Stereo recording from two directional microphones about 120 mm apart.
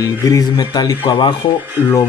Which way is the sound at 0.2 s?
30° left (ahead or behind).